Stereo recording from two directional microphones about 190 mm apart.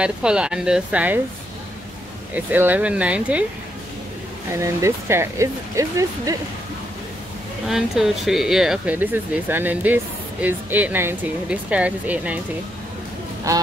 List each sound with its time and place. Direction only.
0.0 s speech: 5° right (ahead or behind)
2.3 s speech: 10° right (ahead or behind)
4.6 s speech: 15° right (ahead or behind)
7.6 s speech: centre (ahead or behind)
13.5 s speech: 15° right (ahead or behind)